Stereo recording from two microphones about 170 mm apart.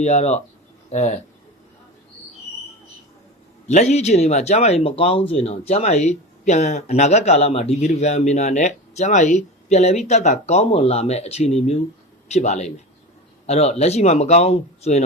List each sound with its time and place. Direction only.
0.0 s speech: 40° left (ahead or behind)
3.7 s speech: 40° left (ahead or behind)